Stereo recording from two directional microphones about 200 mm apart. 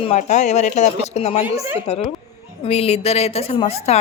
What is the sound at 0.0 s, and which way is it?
A woman's voice, 35° left (ahead or behind).